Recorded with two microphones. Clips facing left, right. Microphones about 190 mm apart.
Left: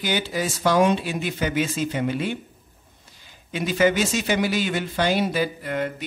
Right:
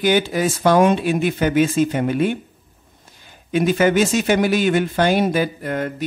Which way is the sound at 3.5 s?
55° right (ahead or behind).